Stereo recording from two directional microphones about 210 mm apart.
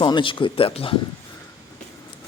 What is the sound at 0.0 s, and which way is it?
Speech, 25° left (ahead or behind).